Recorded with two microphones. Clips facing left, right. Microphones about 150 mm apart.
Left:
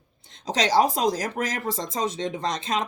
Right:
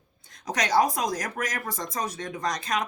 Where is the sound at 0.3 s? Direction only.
25° left (ahead or behind).